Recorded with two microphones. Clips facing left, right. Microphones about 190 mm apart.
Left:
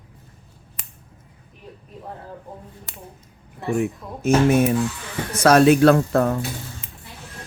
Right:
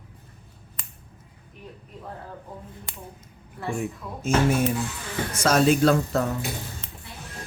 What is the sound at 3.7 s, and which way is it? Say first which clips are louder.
Speech: left 10 dB; 65° left (ahead or behind).